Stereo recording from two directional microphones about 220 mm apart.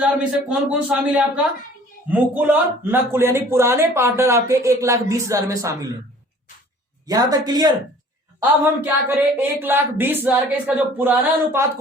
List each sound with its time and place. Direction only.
0.0 s a man's voice: 5° right (ahead or behind)
7.1 s a man's voice: 15° right (ahead or behind)